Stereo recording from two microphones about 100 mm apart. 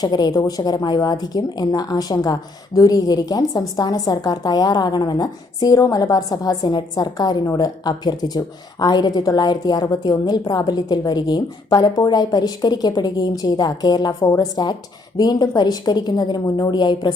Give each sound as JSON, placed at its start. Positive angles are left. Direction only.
{"t": 0.0, "sound": "a woman's voice", "side_deg": 40}